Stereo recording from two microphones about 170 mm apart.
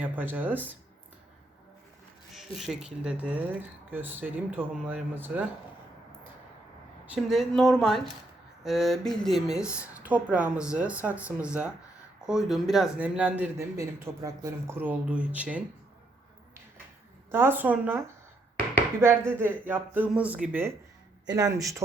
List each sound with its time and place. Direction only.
0.0 s speech: 10° right (ahead or behind)
2.6 s speech: centre (ahead or behind)
7.0 s speech: 5° right (ahead or behind)
17.3 s speech: 10° right (ahead or behind)